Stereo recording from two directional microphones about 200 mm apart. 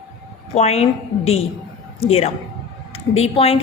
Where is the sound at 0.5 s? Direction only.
35° left (ahead or behind).